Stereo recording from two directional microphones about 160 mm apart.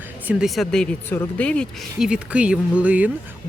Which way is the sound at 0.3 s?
5° right (ahead or behind).